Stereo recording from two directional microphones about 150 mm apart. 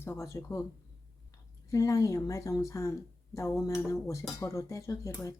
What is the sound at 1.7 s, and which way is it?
A woman's voice, 20° left (ahead or behind).